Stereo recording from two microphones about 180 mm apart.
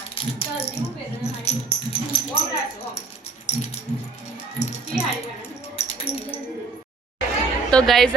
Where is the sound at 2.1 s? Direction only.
30° left (ahead or behind).